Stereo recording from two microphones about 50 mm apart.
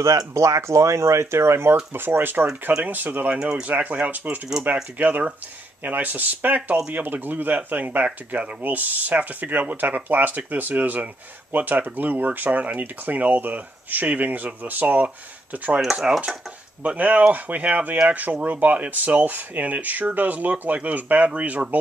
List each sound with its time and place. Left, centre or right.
0.0 s speech: right
2.0 s speech: right
2.8 s speech: right
3.3 s speech: centre
3.6 s speech: right
15.8 s speech: centre
16.1 s speech: centre